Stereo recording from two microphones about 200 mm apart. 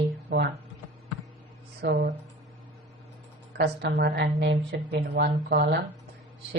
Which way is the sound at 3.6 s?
55° right (ahead or behind).